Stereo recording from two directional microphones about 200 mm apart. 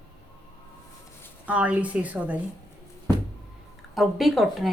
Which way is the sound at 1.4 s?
5° right (ahead or behind).